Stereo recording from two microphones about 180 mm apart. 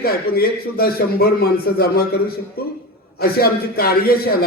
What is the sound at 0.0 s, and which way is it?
A man's voice, 60° left (ahead or behind).